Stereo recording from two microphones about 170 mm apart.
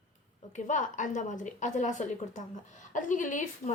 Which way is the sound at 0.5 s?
45° left (ahead or behind).